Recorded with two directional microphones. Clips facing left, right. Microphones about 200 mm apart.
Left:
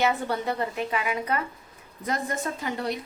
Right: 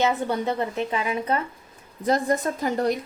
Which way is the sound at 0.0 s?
20° right (ahead or behind).